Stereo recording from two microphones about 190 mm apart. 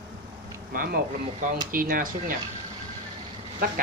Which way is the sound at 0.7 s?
50° right (ahead or behind).